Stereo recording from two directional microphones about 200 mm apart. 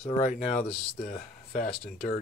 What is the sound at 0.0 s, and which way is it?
Speech, 35° left (ahead or behind).